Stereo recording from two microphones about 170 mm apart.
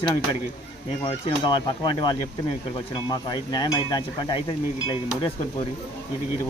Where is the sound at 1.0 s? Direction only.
25° left (ahead or behind).